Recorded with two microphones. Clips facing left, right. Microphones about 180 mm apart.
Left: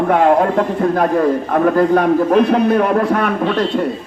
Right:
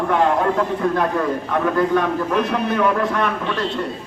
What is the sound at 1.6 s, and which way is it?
A man's voice, 40° left (ahead or behind).